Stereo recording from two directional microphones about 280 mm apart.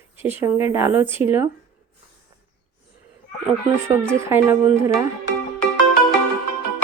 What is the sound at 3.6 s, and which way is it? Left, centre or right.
Speech, centre.